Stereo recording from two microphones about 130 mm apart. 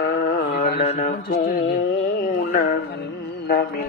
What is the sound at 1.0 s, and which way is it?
Mantra, 90° left.